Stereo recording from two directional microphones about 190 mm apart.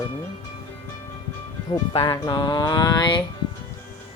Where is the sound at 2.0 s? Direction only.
20° left (ahead or behind).